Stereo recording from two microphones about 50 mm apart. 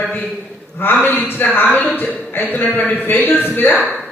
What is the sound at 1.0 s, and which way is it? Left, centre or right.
A man's voice, left.